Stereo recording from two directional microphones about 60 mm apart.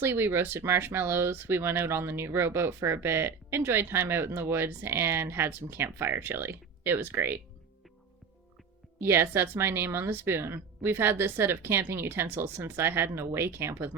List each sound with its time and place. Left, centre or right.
0.0 s speech: right
9.0 s speech: right